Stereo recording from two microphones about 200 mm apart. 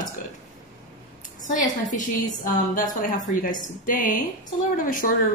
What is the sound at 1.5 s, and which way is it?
A woman's voice, 40° left (ahead or behind).